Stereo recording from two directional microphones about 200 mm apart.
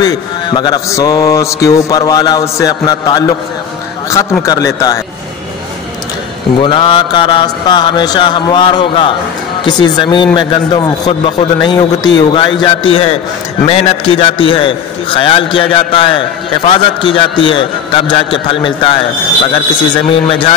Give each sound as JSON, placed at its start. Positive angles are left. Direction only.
{"t": 0.0, "sound": "mantra", "side_deg": 20}
{"t": 6.6, "sound": "mantra", "side_deg": 25}